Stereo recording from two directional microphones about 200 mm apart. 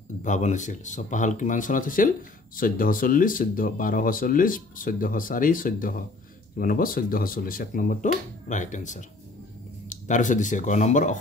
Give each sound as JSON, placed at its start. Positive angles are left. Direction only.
{"t": 0.2, "sound": "speech", "side_deg": 35}